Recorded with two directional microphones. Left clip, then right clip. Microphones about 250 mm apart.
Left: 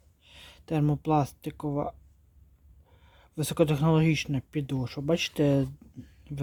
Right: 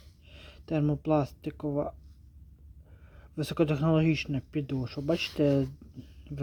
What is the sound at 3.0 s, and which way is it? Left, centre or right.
Speech, left.